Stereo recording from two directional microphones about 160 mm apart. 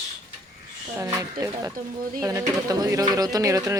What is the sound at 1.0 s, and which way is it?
Speech, 20° right (ahead or behind).